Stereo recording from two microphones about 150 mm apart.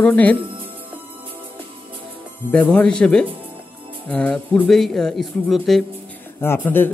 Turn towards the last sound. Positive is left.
turn(degrees=15)  # may be behind; listen again after turning